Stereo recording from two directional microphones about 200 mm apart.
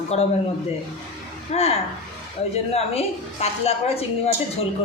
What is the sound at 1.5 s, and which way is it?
A woman's voice, 30° left (ahead or behind).